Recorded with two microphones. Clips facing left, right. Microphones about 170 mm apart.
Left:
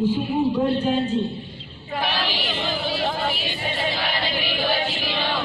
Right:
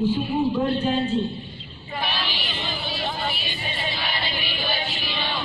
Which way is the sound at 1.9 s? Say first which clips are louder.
Left 4 dB; 90° left.